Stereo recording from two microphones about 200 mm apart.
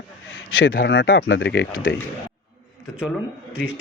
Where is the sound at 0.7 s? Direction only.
65° left (ahead or behind).